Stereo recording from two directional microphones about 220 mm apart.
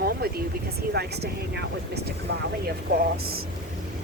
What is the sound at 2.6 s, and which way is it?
Speech, 45° right (ahead or behind).